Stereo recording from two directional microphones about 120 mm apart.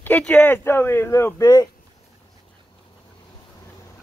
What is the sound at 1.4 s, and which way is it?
Speech, 35° left (ahead or behind).